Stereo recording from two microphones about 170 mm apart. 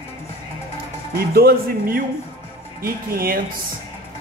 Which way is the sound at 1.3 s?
60° right (ahead or behind).